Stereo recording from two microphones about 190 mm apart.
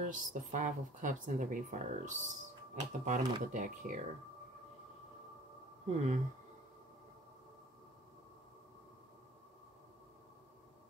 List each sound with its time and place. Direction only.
0.0 s speech: 40° right (ahead or behind)
5.9 s speech: 40° right (ahead or behind)